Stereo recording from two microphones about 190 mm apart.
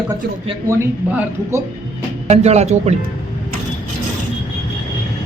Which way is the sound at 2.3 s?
35° right (ahead or behind).